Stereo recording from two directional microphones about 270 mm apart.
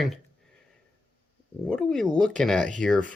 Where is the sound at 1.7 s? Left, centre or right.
Centre.